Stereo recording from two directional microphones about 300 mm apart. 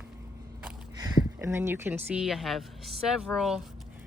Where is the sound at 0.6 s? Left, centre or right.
Centre.